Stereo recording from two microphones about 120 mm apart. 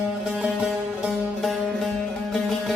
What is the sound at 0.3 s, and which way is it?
Music, 5° right (ahead or behind).